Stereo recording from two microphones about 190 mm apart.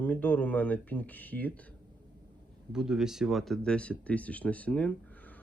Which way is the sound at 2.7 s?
5° right (ahead or behind).